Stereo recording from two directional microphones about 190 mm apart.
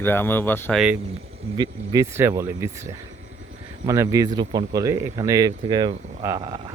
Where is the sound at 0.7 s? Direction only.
5° right (ahead or behind).